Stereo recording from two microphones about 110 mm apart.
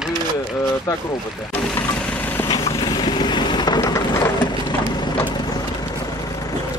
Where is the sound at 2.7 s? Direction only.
40° left (ahead or behind).